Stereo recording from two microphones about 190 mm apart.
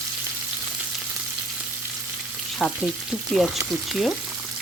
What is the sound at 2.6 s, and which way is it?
Frying, 5° right (ahead or behind).